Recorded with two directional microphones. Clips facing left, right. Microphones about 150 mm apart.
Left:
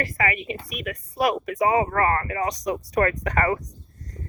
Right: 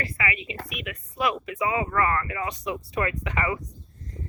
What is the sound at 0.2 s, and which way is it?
A woman's voice, 50° left (ahead or behind).